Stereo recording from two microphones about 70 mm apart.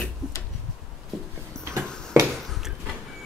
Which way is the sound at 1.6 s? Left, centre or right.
Right.